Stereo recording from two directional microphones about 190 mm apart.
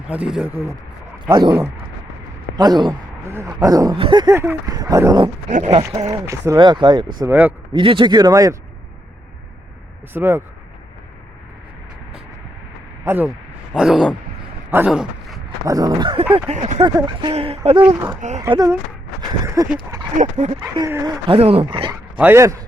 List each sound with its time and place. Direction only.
0.1 s speech: 5° right (ahead or behind)
1.3 s speech: 20° right (ahead or behind)
7.2 s speech: 10° right (ahead or behind)
7.7 s speech: 25° right (ahead or behind)
10.1 s speech: 10° right (ahead or behind)
13.1 s a man's voice: 10° right (ahead or behind)
15.6 s speech: 20° right (ahead or behind)
16.3 s a sound: 35° right (ahead or behind)
16.8 s speech: 25° right (ahead or behind)
17.9 s speech: 20° right (ahead or behind)
21.2 s speech: 30° right (ahead or behind)
22.2 s speech: 15° right (ahead or behind)